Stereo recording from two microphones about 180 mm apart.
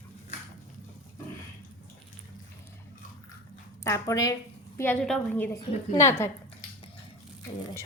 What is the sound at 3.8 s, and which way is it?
Speech, 15° left (ahead or behind).